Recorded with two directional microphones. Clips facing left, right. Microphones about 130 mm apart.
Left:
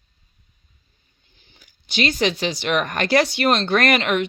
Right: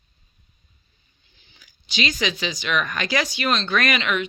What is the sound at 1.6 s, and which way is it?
Speech, 55° left (ahead or behind).